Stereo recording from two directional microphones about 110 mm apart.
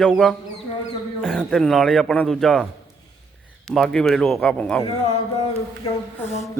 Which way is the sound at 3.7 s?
5° left (ahead or behind).